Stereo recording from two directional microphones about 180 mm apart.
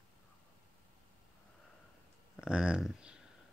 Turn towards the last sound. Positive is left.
turn(degrees=-5)  # may be behind; listen again after turning